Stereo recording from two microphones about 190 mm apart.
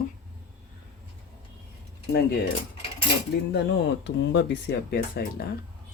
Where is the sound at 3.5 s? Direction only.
65° left (ahead or behind).